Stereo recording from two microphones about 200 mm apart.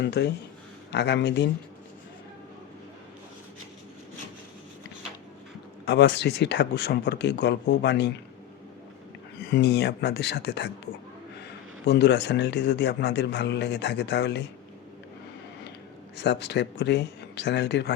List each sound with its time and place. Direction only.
0.0 s a man's voice: 60° left (ahead or behind)
5.8 s a man's voice: 60° left (ahead or behind)
9.5 s a man's voice: 55° left (ahead or behind)
11.9 s a man's voice: 55° left (ahead or behind)
16.1 s a man's voice: 55° left (ahead or behind)